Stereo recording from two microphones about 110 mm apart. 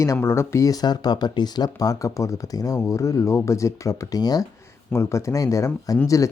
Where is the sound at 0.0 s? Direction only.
25° left (ahead or behind).